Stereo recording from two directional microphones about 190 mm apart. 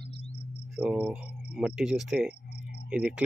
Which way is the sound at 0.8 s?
5° right (ahead or behind).